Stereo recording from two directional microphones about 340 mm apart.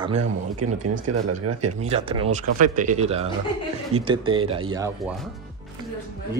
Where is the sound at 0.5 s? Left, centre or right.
Right.